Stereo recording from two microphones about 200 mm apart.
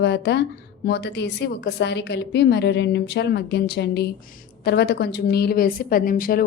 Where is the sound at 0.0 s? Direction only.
60° left (ahead or behind).